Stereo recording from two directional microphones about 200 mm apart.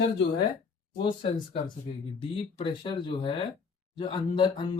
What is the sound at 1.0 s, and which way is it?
Speech, 25° left (ahead or behind).